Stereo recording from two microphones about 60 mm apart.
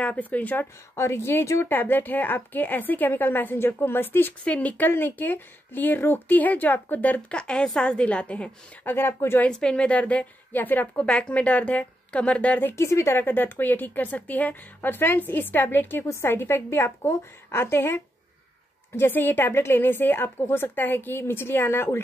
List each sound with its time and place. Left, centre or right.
0.0 s a woman's voice: left
0.9 s a woman's voice: left
1.7 s speech: left
4.5 s a woman's voice: left
7.3 s a woman's voice: centre
8.8 s speech: left
9.5 s a woman's voice: centre
12.7 s a woman's voice: left